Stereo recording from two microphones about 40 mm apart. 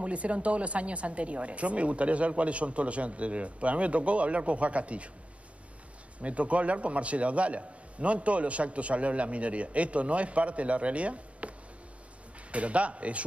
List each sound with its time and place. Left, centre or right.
0.0 s a man's voice: right
6.2 s a man's voice: right